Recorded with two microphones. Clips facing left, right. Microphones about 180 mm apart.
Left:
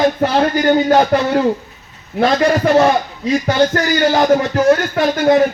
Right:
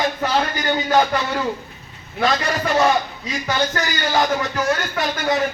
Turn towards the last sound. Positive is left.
turn(degrees=50)  # may be behind; listen again after turning